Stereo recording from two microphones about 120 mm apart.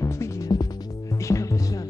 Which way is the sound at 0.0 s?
30° left (ahead or behind).